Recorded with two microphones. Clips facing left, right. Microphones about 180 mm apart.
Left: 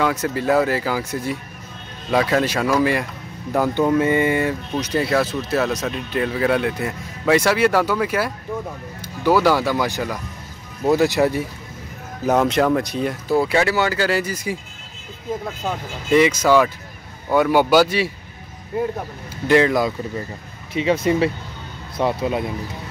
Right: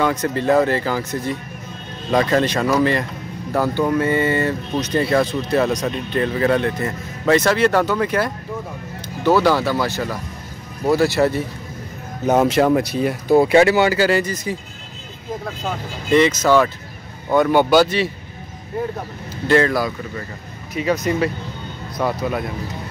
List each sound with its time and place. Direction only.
0.0 s speech: 5° left (ahead or behind)
12.3 s speech: 5° right (ahead or behind)
13.3 s speech: 20° right (ahead or behind)
13.9 s speech: centre (ahead or behind)
15.6 s speech: 10° left (ahead or behind)
19.4 s speech: 15° left (ahead or behind)